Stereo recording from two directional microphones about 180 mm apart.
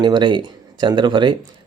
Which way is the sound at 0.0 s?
25° right (ahead or behind).